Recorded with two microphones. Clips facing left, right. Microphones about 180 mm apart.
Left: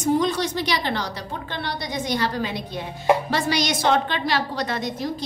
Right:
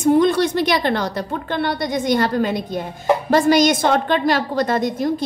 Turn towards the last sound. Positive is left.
turn(degrees=-50)  # may be behind; listen again after turning